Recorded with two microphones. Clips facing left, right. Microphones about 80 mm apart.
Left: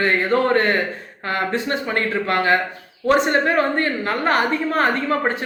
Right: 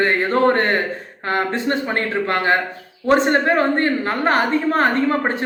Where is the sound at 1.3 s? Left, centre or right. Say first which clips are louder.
Right 2 dB; right.